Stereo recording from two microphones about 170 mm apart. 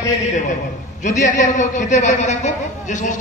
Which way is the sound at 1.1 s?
45° left (ahead or behind).